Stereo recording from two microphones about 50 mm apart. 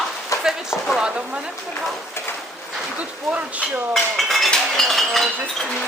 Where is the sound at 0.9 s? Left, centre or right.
Right.